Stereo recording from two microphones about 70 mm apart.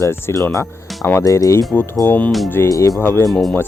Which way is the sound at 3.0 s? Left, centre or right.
Left.